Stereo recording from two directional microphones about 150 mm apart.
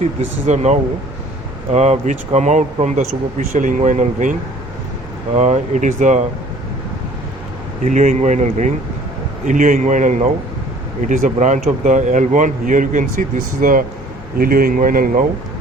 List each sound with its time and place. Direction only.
0.0 s speech: 50° right (ahead or behind)
7.9 s speech: 55° right (ahead or behind)
14.3 s speech: 75° right (ahead or behind)